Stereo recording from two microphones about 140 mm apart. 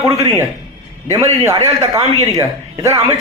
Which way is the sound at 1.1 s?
20° right (ahead or behind).